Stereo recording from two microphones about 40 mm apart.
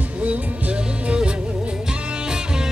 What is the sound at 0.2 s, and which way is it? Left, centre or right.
Music, right.